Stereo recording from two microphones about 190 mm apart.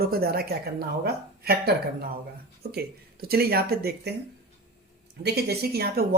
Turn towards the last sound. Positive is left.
turn(degrees=-55)  # may be behind; listen again after turning